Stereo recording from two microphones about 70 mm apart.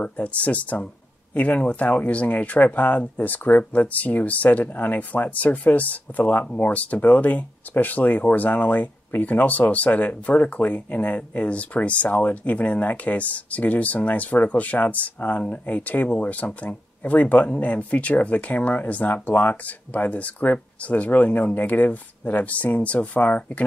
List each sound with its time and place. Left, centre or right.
0.0 s speech: left